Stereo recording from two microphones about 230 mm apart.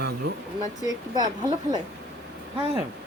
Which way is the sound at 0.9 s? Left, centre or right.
Centre.